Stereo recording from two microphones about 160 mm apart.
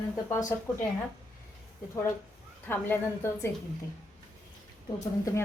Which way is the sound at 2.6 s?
15° left (ahead or behind).